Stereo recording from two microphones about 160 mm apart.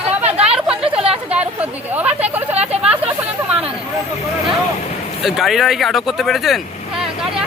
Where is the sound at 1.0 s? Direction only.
5° right (ahead or behind).